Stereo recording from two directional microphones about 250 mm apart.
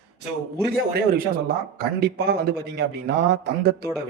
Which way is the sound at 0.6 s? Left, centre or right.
Right.